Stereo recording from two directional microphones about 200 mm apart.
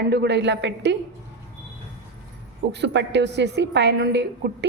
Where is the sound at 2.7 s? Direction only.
60° right (ahead or behind).